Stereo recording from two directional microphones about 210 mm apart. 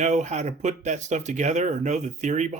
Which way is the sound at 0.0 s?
35° right (ahead or behind).